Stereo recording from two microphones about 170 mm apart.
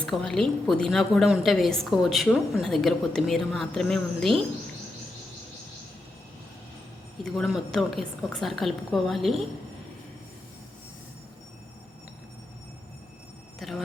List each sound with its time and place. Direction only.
0.0 s a woman's voice: 5° left (ahead or behind)
7.3 s a woman's voice: centre (ahead or behind)
13.6 s a sound: centre (ahead or behind)